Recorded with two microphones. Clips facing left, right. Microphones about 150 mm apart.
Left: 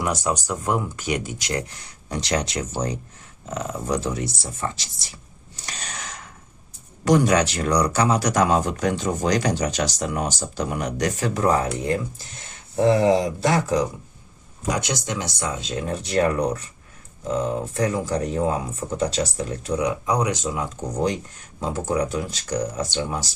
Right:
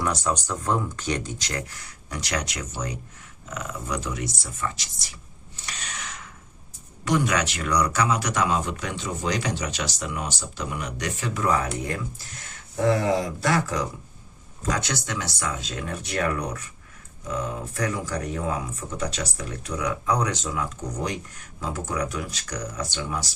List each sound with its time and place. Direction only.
0.0 s speech: 15° left (ahead or behind); by 5.0 s 30° left (ahead or behind)
5.5 s a sound: 40° left (ahead or behind)
7.0 s speech: 35° left (ahead or behind); by 20.6 s 15° left (ahead or behind)
20.6 s speech: 25° left (ahead or behind)